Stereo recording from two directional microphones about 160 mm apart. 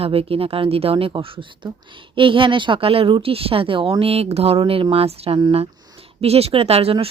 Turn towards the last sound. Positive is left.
turn(degrees=-35)  # may be behind; listen again after turning